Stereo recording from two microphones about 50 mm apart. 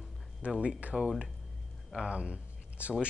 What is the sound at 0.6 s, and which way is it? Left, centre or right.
Speech, right.